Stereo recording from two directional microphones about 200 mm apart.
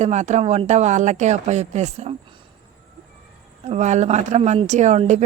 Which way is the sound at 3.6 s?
35° right (ahead or behind).